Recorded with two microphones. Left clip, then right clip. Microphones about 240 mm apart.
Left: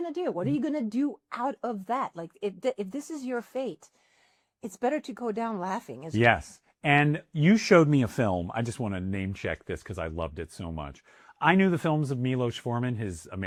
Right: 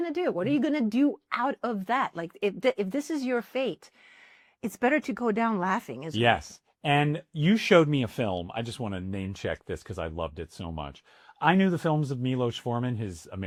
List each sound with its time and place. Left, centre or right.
0.2 s speech: centre
0.7 s speech: right
6.1 s speech: left